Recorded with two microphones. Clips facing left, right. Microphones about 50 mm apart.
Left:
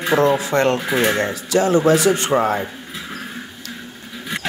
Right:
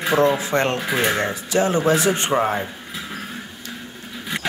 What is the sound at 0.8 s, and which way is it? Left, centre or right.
Speech, centre.